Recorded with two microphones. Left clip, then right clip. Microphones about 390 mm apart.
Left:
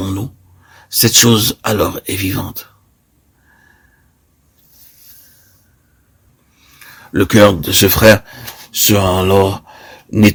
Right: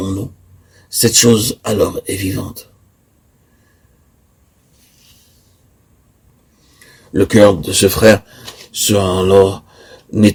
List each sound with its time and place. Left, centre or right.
0.9 s speech: left
7.1 s speech: left
9.5 s a sound: left